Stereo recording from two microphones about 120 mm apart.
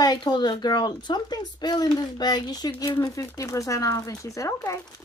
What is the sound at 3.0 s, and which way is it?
Speech, 30° left (ahead or behind).